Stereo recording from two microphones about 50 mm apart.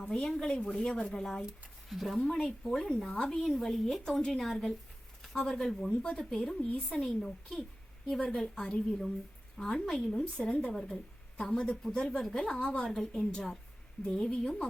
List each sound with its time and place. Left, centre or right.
0.1 s a woman's voice: centre
2.1 s a woman's voice: centre
5.2 s a sound: centre
5.5 s a woman's voice: centre
10.2 s speech: left
10.8 s a woman's voice: centre
11.3 s a woman's voice: centre
12.9 s a woman's voice: centre